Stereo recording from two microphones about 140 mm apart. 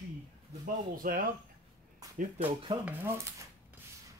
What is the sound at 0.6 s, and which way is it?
Speech, 90° right.